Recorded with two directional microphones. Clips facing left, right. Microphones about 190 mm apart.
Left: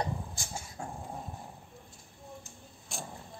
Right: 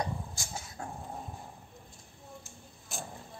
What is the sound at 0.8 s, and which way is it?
Dog, 10° left (ahead or behind).